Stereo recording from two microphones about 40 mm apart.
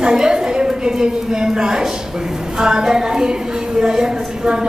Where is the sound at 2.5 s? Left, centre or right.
Centre.